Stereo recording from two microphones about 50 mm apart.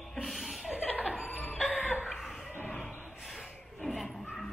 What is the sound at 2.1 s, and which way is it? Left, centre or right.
Chuckle, centre.